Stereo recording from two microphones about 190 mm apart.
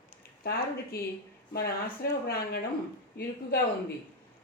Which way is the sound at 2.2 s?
55° left (ahead or behind).